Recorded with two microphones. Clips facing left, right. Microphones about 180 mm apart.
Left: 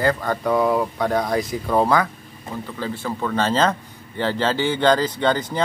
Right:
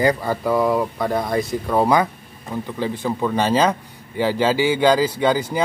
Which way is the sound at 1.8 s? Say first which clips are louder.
Right 2 dB; 20° right (ahead or behind).